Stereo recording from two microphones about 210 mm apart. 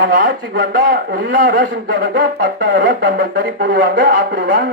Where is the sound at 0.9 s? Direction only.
45° right (ahead or behind).